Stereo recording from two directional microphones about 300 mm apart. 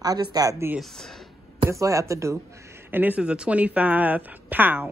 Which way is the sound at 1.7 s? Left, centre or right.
Centre.